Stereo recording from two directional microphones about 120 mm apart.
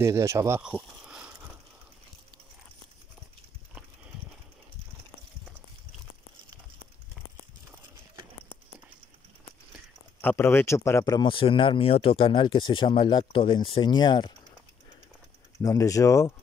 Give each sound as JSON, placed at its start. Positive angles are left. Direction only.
{"t": 0.0, "sound": "speech", "side_deg": -25}
{"t": 0.6, "sound": "a sound", "side_deg": -10}
{"t": 10.2, "sound": "speech", "side_deg": 20}
{"t": 11.1, "sound": "speech", "side_deg": 45}
{"t": 15.6, "sound": "speech", "side_deg": 30}